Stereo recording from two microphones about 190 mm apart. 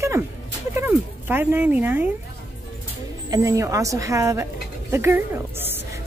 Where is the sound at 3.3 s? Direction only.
15° right (ahead or behind).